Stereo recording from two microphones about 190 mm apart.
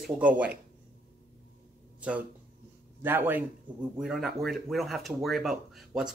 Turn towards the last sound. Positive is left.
turn(degrees=0)  # may be behind; listen again after turning